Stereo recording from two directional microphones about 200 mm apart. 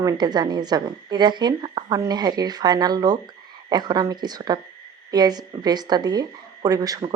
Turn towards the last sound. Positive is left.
turn(degrees=-20)  # may be behind; listen again after turning